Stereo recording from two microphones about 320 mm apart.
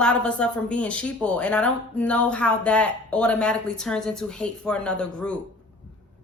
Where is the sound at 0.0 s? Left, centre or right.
Centre.